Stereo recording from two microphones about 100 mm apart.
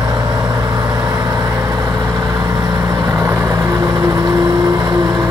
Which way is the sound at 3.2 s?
25° right (ahead or behind).